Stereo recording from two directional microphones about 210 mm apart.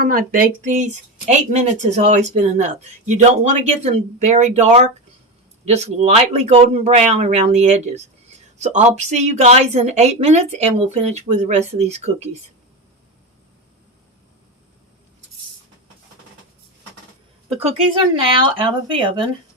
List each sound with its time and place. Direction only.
0.0 s a woman's voice: 40° right (ahead or behind)
17.5 s speech: 30° right (ahead or behind)